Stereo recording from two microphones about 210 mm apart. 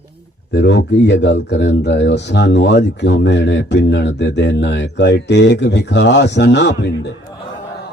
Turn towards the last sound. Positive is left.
turn(degrees=55)  # may be behind; listen again after turning